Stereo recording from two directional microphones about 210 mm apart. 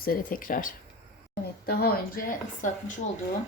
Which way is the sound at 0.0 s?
45° left (ahead or behind).